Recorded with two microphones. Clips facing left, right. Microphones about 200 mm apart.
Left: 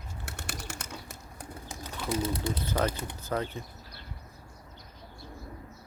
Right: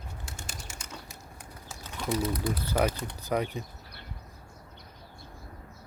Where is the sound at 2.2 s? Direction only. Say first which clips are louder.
Right 1 dB; 25° left (ahead or behind).